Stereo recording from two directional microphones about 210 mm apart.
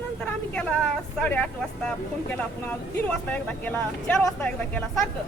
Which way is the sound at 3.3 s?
10° left (ahead or behind).